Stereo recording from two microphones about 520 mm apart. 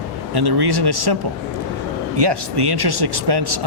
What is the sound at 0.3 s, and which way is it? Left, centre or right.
Speech, right.